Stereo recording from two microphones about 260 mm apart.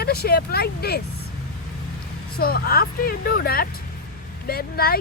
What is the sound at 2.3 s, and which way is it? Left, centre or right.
Speech, left.